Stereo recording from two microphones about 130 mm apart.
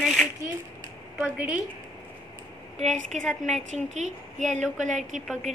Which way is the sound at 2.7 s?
70° right (ahead or behind).